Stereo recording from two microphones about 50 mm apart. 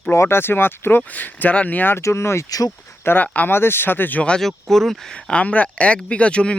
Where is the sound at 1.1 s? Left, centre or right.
Left.